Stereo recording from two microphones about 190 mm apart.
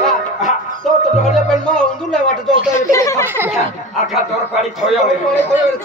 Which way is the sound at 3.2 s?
10° right (ahead or behind).